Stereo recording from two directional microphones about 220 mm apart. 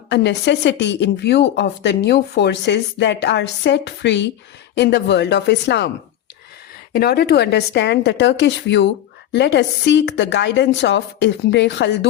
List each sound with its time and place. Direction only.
0.1 s a woman's voice: 50° left (ahead or behind)
6.9 s a woman's voice: 45° left (ahead or behind)